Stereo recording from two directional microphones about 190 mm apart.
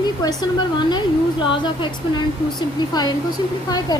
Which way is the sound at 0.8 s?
25° left (ahead or behind).